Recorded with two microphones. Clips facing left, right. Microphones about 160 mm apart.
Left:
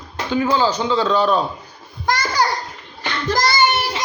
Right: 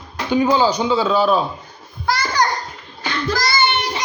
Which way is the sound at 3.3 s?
45° left (ahead or behind).